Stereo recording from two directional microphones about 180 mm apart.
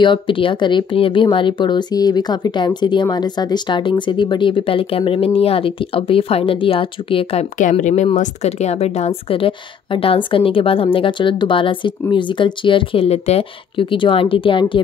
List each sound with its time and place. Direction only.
0.0 s speech: 25° left (ahead or behind)
7.5 s speech: 45° left (ahead or behind)